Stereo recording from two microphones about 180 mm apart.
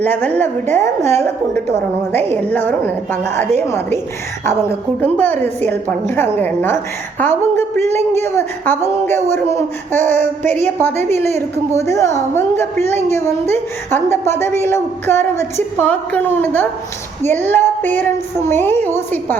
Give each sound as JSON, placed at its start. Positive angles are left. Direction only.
{"t": 0.0, "sound": "a woman's voice", "side_deg": 10}
{"t": 5.1, "sound": "a woman's voice", "side_deg": 10}